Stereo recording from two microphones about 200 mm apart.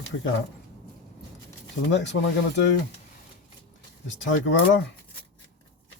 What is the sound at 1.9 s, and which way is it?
Speech, 65° left (ahead or behind).